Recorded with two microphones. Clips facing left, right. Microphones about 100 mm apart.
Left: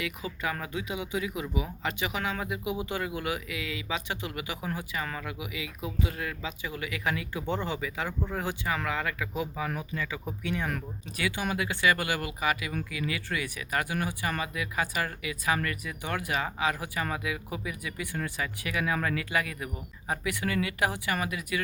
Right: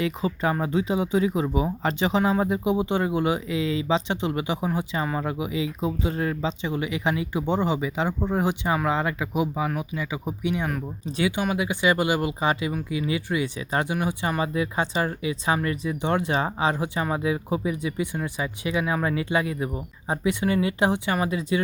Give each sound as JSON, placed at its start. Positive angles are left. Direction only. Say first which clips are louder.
{"t": 0.0, "sound": "speech", "louder": "right 9 dB", "side_deg": -30}